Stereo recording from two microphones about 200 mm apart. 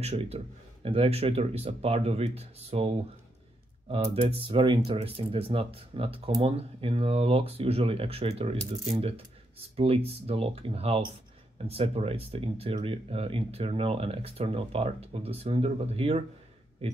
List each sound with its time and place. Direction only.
0.0 s speech: 30° right (ahead or behind)
3.9 s speech: 30° right (ahead or behind)